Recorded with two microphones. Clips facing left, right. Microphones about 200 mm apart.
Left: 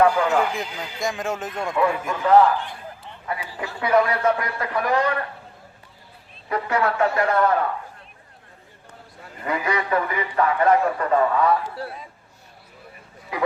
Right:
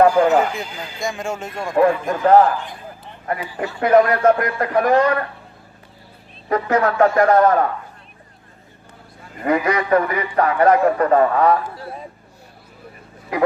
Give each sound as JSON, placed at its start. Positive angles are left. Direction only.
{"t": 0.0, "sound": "a man's voice", "side_deg": -40}
{"t": 1.0, "sound": "speech", "side_deg": 0}
{"t": 1.7, "sound": "a man's voice", "side_deg": -45}
{"t": 6.5, "sound": "a man's voice", "side_deg": -45}
{"t": 9.4, "sound": "a man's voice", "side_deg": -40}